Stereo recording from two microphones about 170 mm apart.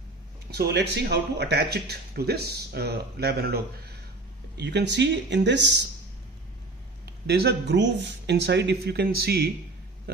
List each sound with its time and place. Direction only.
0.6 s speech: 80° right
4.6 s speech: 90° right
7.1 s speech: 75° right (ahead or behind)
9.0 s speech: 65° right (ahead or behind)
10.1 s a sound: 65° right (ahead or behind)